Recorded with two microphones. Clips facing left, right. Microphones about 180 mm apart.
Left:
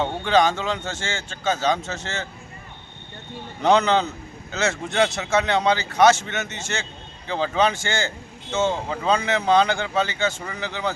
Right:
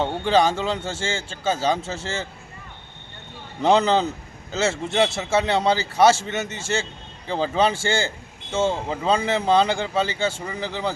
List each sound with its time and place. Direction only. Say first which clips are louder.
0.0 s speech: even; 30° right (ahead or behind)
3.6 s speech: even; 30° right (ahead or behind)